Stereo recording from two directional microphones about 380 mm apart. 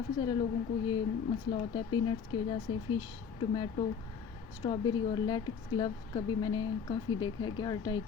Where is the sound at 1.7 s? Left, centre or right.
Centre.